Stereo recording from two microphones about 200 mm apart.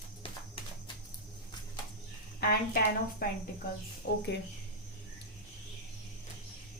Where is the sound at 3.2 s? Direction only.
45° left (ahead or behind).